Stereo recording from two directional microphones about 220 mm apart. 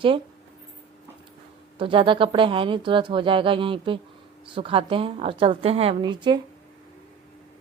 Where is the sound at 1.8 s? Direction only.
25° right (ahead or behind).